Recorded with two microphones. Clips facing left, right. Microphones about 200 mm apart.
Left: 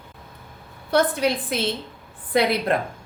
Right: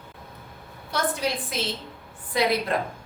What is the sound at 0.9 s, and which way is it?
A woman's voice, 60° left (ahead or behind).